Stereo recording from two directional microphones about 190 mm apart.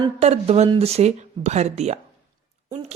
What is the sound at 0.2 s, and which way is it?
A woman's voice, 35° right (ahead or behind).